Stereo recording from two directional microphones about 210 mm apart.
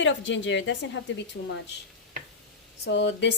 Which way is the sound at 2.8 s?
55° left (ahead or behind).